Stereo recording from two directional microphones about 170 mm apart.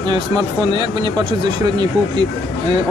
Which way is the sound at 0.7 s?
30° right (ahead or behind).